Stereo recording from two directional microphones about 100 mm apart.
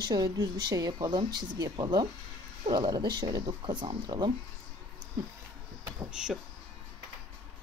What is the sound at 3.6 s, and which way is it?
Speech, 55° right (ahead or behind).